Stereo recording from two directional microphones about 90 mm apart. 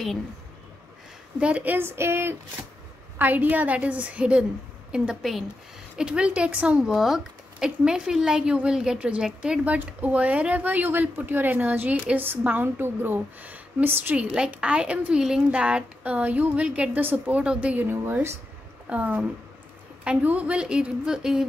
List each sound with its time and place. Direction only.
1.4 s a woman's voice: 15° right (ahead or behind)
14.3 s a woman's voice: 10° right (ahead or behind)